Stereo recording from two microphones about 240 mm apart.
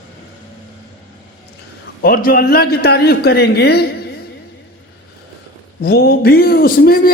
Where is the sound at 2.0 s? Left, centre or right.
Left.